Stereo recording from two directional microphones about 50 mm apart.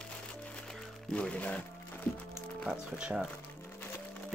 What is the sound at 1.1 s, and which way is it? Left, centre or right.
Speech, left.